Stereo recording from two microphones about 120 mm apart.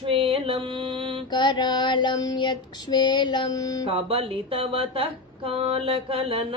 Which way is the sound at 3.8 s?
50° right (ahead or behind).